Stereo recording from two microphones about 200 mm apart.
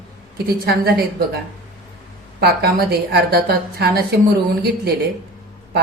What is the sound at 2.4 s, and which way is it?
A woman's voice, 50° right (ahead or behind).